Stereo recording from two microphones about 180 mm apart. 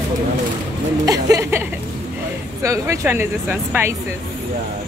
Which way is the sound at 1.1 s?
20° right (ahead or behind).